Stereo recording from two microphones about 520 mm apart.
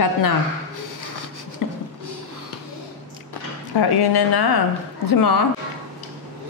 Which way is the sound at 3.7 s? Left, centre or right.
Left.